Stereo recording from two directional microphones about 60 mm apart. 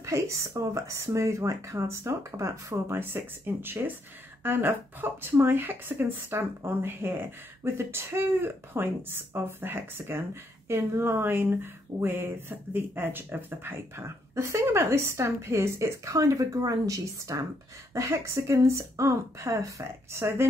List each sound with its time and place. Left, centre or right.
0.0 s speech: right
3.0 s speech: right
16.6 s a woman's voice: right
17.9 s speech: right